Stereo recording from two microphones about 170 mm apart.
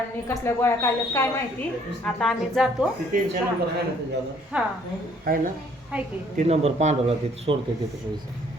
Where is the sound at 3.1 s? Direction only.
55° right (ahead or behind).